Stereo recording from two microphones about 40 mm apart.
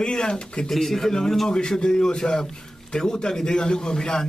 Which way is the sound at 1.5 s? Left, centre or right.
Left.